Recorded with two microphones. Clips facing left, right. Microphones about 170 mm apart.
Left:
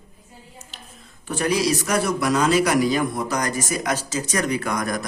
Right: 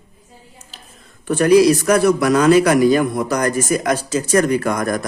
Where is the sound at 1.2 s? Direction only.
60° right (ahead or behind).